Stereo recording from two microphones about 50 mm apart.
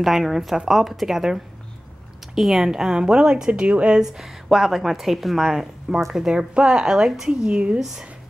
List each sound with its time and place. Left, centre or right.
0.0 s a woman's voice: centre; by 4.0 s right
4.0 s a woman's voice: centre
7.4 s speech: right
7.8 s a woman's voice: centre